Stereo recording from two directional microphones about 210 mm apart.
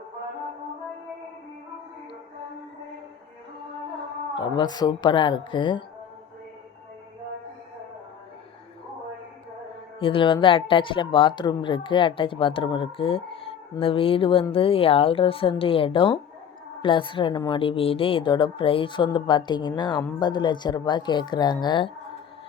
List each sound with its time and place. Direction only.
4.4 s speech: 20° left (ahead or behind)
10.0 s speech: 25° left (ahead or behind)